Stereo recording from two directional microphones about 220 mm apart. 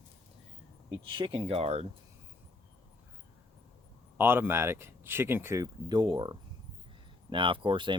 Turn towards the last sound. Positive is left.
turn(degrees=-20)  # may be behind; listen again after turning